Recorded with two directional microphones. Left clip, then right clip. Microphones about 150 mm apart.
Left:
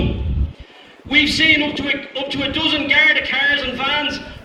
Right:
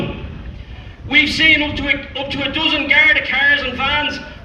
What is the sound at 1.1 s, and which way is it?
A man's voice, 30° left (ahead or behind).